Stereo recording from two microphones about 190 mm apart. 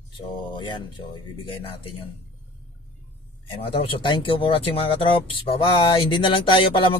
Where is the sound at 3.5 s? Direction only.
30° left (ahead or behind).